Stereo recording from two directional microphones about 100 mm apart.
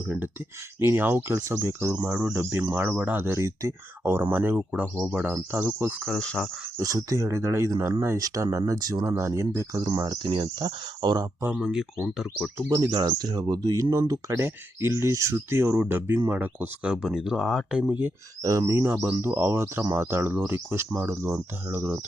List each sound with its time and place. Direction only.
0.0 s speech: 20° right (ahead or behind); by 5.5 s 5° right (ahead or behind)
5.5 s speech: 20° right (ahead or behind)
6.0 s speech: 5° left (ahead or behind)
6.7 s speech: 35° right (ahead or behind)
9.0 s speech: 30° right (ahead or behind); by 11.3 s 45° right (ahead or behind)
11.6 s speech: 5° right (ahead or behind)
12.6 s speech: 45° right (ahead or behind); by 17.7 s centre (ahead or behind)
17.7 s speech: 10° right (ahead or behind)
18.4 s speech: 30° right (ahead or behind)